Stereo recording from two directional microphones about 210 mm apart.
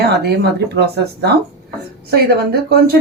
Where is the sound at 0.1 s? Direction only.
50° right (ahead or behind).